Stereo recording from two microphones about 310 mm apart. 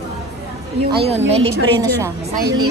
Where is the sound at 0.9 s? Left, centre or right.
Centre.